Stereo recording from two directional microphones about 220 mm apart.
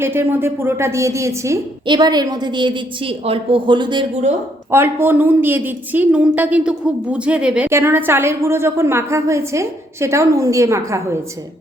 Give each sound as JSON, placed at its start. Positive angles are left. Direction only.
{"t": 0.0, "sound": "speech", "side_deg": -10}
{"t": 4.7, "sound": "speech", "side_deg": -10}